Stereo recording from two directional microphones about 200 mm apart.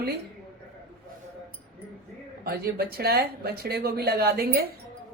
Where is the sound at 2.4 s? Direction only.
50° right (ahead or behind).